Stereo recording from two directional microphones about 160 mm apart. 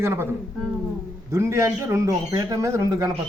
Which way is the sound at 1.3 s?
15° right (ahead or behind).